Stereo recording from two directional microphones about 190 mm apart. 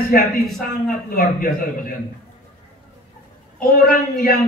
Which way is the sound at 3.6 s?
50° left (ahead or behind).